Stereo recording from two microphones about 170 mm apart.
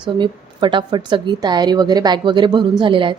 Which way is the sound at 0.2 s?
30° right (ahead or behind).